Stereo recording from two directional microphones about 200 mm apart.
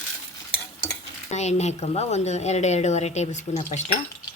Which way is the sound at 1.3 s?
35° left (ahead or behind).